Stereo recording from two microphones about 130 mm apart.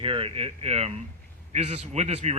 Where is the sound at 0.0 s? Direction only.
45° right (ahead or behind).